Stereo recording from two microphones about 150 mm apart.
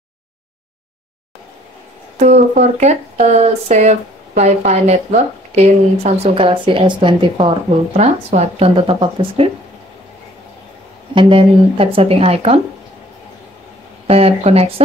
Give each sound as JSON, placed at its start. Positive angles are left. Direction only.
{"t": 2.1, "sound": "speech", "side_deg": -55}
{"t": 8.0, "sound": "speech", "side_deg": -50}
{"t": 11.1, "sound": "speech", "side_deg": -35}
{"t": 14.0, "sound": "speech", "side_deg": -40}